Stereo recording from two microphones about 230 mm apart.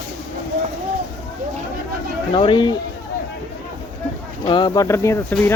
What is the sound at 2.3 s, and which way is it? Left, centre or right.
Speech, left.